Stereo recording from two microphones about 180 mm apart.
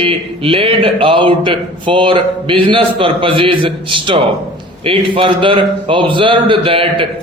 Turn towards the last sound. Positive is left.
turn(degrees=-30)  # may be behind; listen again after turning